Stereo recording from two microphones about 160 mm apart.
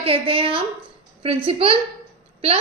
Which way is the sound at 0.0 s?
35° right (ahead or behind).